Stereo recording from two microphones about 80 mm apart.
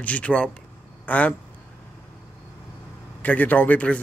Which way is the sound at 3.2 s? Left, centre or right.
Left.